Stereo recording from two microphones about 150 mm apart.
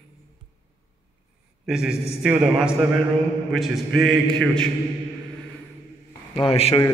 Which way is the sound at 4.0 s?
5° left (ahead or behind).